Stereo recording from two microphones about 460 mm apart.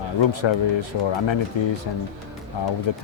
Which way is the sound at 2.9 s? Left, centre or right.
Left.